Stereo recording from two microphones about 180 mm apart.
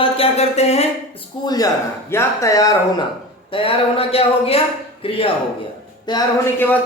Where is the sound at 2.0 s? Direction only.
15° left (ahead or behind).